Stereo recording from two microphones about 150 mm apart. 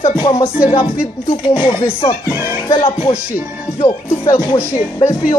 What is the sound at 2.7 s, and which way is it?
Speech, 35° left (ahead or behind).